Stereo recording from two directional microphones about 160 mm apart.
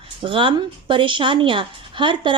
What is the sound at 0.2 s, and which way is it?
A woman's voice, 30° right (ahead or behind).